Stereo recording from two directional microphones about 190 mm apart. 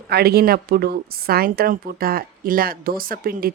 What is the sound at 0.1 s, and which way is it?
A woman's voice, 55° right (ahead or behind).